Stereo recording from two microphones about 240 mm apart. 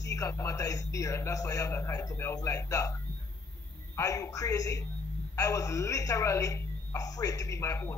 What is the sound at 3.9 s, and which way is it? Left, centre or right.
A woman's voice, centre.